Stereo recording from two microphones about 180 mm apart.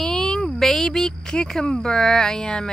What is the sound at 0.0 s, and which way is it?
Speech, 5° left (ahead or behind).